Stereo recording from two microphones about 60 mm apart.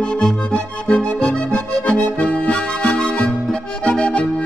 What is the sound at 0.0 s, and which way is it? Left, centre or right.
Music, centre.